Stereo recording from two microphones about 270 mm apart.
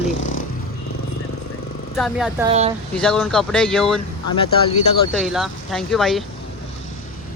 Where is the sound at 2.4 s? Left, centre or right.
Right.